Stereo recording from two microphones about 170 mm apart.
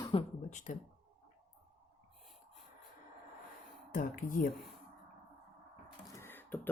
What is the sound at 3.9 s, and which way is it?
Speech, 55° left (ahead or behind).